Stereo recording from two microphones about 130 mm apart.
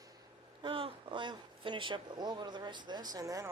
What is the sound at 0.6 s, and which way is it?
Speech, 40° right (ahead or behind).